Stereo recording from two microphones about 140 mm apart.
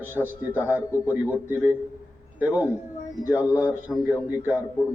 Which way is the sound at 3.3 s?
20° left (ahead or behind).